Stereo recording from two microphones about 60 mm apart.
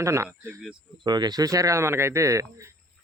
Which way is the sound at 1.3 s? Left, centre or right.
Right.